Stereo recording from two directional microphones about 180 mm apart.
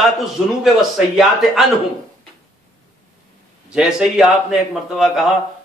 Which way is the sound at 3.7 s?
5° right (ahead or behind).